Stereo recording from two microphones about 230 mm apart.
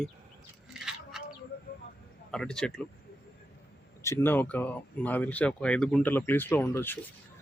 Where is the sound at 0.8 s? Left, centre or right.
Centre.